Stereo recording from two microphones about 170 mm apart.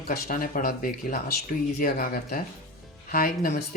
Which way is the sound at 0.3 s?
55° left (ahead or behind).